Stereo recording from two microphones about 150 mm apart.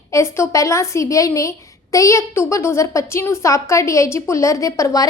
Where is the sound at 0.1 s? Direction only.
20° left (ahead or behind).